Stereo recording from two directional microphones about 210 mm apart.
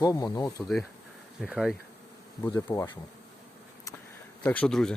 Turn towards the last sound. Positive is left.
turn(degrees=5)  # may be behind; listen again after turning